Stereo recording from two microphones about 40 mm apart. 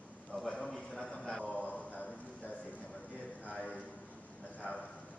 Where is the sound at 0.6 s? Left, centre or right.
Centre.